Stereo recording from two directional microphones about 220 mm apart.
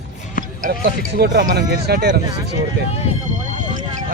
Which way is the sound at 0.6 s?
45° right (ahead or behind).